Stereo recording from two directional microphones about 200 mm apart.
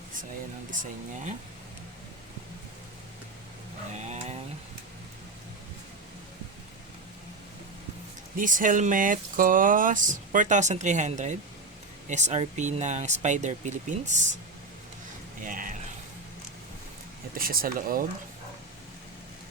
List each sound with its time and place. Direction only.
0.7 s speech: 40° right (ahead or behind)
3.9 s speech: 35° right (ahead or behind)
8.4 s speech: 40° right (ahead or behind)
15.4 s speech: 40° right (ahead or behind)
17.3 s speech: 45° right (ahead or behind)